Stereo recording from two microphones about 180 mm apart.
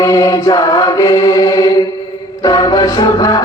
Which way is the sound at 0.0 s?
20° left (ahead or behind).